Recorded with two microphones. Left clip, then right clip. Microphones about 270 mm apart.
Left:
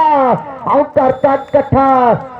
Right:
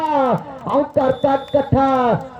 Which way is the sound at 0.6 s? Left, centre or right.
Left.